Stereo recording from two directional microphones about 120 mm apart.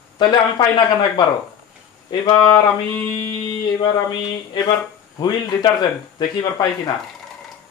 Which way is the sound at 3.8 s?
35° left (ahead or behind).